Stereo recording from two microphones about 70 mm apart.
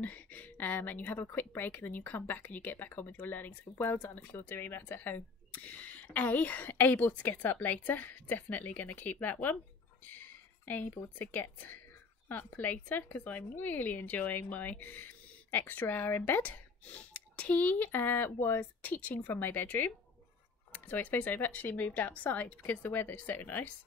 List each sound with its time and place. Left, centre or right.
0.0 s speech: left